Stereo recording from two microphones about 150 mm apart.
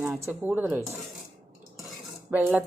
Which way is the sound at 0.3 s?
10° right (ahead or behind).